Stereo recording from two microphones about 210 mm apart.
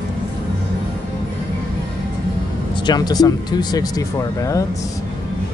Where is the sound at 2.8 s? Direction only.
20° left (ahead or behind).